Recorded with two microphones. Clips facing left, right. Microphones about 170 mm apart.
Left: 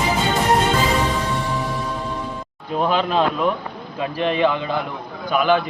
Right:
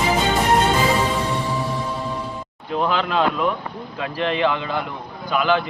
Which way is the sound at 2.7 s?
15° left (ahead or behind).